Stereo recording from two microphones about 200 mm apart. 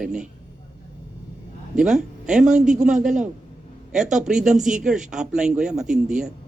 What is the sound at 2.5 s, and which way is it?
Speech, 40° right (ahead or behind).